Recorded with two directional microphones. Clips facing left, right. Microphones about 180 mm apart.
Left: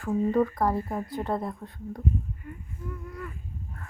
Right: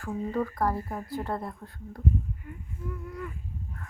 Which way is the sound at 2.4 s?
5° right (ahead or behind).